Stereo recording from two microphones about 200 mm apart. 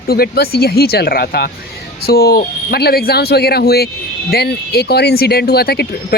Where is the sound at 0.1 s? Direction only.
50° left (ahead or behind).